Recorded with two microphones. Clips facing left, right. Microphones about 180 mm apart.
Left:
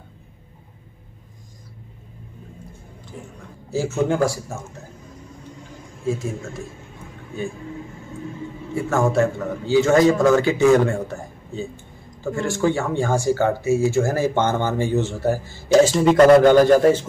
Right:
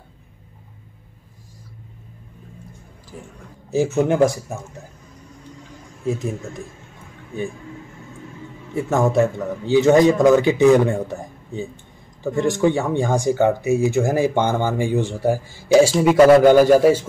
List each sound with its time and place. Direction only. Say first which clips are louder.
3.7 s speech: right 3 dB; 20° right (ahead or behind)
6.0 s speech: right 1 dB; 20° right (ahead or behind)
9.1 s a man's voice: right 1 dB; 20° right (ahead or behind)